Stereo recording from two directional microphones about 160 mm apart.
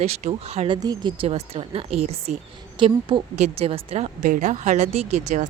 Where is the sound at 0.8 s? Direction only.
25° right (ahead or behind).